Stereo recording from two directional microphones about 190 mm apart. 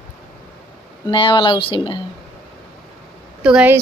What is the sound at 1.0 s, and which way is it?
Speech, 25° left (ahead or behind).